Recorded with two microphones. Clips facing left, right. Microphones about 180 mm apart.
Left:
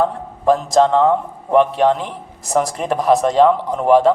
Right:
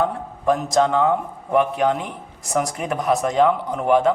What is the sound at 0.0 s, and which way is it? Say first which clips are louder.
A man's voice: left 4 dB; 30° left (ahead or behind).